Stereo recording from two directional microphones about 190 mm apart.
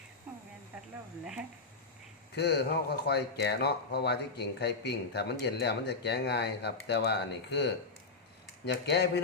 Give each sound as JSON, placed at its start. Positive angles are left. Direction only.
{"t": 1.2, "sound": "speech", "side_deg": -5}
{"t": 2.3, "sound": "speech", "side_deg": 60}